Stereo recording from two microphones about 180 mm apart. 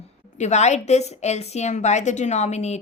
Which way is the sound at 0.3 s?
40° left (ahead or behind).